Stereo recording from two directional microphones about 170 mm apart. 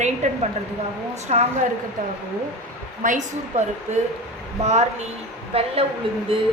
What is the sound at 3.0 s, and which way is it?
A woman's voice, 45° right (ahead or behind).